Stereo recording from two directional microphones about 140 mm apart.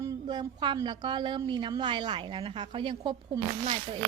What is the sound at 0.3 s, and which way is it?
A woman's voice, 35° right (ahead or behind).